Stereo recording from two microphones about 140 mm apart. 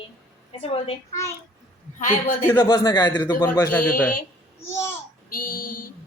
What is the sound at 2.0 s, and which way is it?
Speech, 60° left (ahead or behind).